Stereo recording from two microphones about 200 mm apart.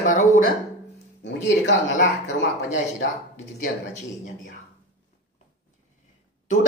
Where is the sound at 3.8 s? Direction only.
40° left (ahead or behind).